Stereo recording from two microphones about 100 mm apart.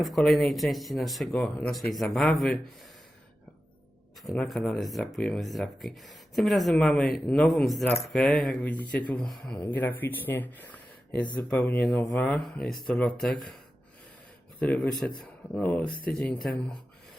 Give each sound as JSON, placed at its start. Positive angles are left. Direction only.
{"t": 0.0, "sound": "speech", "side_deg": 0}
{"t": 4.2, "sound": "speech", "side_deg": 0}
{"t": 8.6, "sound": "speech", "side_deg": 15}
{"t": 9.6, "sound": "speech", "side_deg": 20}
{"t": 12.1, "sound": "speech", "side_deg": 5}
{"t": 14.6, "sound": "speech", "side_deg": 15}